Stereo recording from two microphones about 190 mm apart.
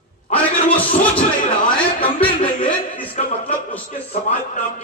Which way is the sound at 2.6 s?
30° left (ahead or behind).